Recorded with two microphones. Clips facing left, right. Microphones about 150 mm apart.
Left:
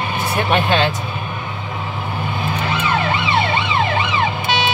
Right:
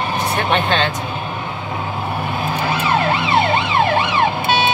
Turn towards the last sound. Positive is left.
turn(degrees=-50)  # may be behind; listen again after turning